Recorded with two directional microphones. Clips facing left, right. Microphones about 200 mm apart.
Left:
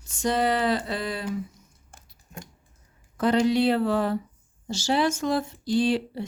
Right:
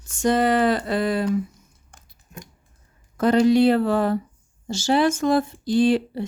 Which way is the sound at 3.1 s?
45° right (ahead or behind).